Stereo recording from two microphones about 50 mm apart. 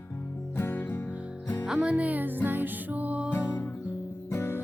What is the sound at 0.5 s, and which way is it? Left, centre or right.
Music, left.